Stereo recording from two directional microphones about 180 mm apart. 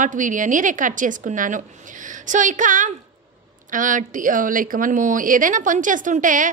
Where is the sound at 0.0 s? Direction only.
45° right (ahead or behind).